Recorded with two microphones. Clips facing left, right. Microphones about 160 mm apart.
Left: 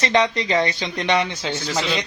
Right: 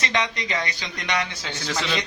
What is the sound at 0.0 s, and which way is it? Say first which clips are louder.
Speech: left 7 dB; 35° left (ahead or behind).